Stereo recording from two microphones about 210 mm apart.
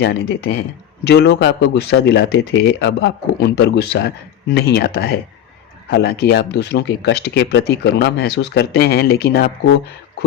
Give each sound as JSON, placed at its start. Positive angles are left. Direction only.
{"t": 0.0, "sound": "speech", "side_deg": 50}